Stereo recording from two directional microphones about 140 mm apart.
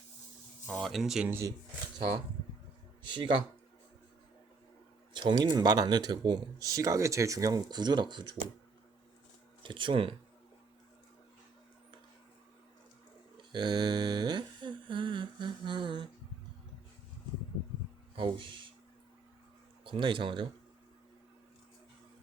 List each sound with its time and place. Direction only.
0.7 s speech: centre (ahead or behind)
1.3 s speech: 20° right (ahead or behind)
2.0 s speech: 35° right (ahead or behind)
5.1 s speech: 30° right (ahead or behind)
9.6 s speech: 35° right (ahead or behind)
13.3 s a sound: 35° right (ahead or behind)
18.2 s speech: 35° right (ahead or behind)
19.8 s speech: 35° right (ahead or behind)